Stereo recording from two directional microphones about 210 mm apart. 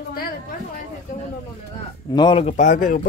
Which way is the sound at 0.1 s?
45° left (ahead or behind).